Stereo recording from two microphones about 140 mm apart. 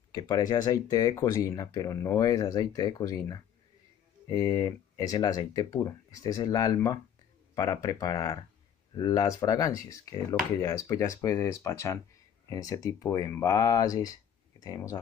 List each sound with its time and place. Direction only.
0.1 s speech: 30° left (ahead or behind)